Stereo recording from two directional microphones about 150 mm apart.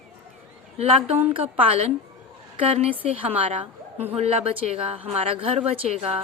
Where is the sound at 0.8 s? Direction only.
45° right (ahead or behind).